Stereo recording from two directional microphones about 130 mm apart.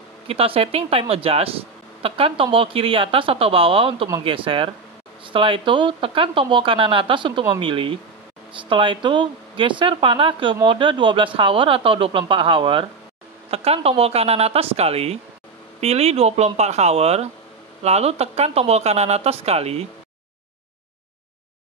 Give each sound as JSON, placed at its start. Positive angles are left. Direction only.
{"t": 0.3, "sound": "a woman's voice", "side_deg": -50}